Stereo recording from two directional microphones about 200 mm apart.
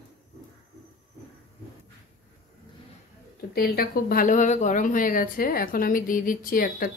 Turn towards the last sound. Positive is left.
turn(degrees=45)  # may be behind; listen again after turning